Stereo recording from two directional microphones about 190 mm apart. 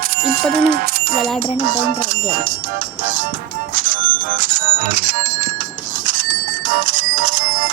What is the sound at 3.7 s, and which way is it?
Music, 45° right (ahead or behind).